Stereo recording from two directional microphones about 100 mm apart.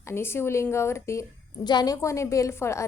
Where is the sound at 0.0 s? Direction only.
25° left (ahead or behind).